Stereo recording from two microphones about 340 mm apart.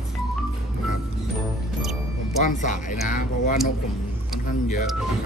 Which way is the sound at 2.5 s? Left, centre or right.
Left.